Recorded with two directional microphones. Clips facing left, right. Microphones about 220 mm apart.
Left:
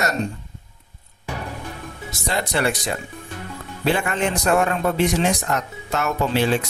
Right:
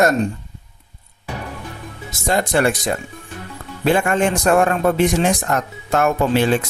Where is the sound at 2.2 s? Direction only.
50° right (ahead or behind).